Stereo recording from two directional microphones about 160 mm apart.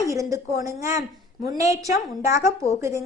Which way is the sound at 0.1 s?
20° right (ahead or behind).